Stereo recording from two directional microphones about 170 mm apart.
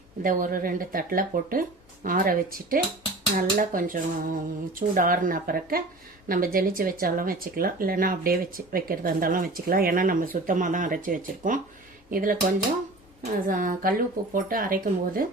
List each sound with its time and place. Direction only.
0.2 s speech: 55° right (ahead or behind)
3.3 s dishes: 55° right (ahead or behind)
6.2 s speech: 55° right (ahead or behind)
13.5 s dishes: 50° right (ahead or behind)
14.2 s speech: 60° right (ahead or behind)